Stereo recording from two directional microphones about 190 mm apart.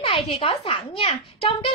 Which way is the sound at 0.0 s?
30° left (ahead or behind).